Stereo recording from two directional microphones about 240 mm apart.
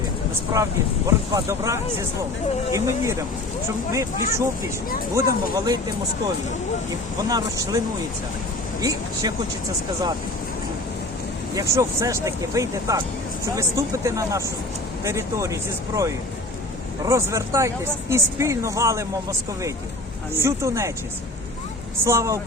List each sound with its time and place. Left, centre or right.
0.5 s speech: centre
7.3 s speech: centre
8.8 s speech: centre
11.5 s speech: centre
17.1 s speech: centre
20.3 s speech: centre
22.0 s speech: centre